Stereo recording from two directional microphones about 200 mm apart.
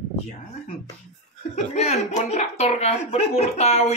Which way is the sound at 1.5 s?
35° left (ahead or behind).